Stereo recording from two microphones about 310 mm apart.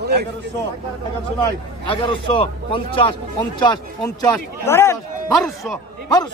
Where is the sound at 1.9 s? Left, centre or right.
Centre.